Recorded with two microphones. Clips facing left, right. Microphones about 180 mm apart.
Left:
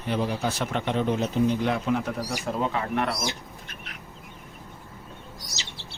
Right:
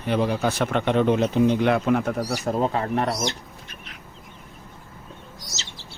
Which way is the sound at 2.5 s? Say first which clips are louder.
Right 4 dB; 40° right (ahead or behind).